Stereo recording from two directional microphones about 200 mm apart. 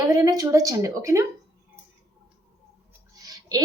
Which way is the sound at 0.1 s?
15° right (ahead or behind).